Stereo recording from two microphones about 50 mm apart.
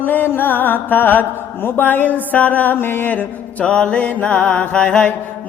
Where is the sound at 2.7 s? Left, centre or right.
Left.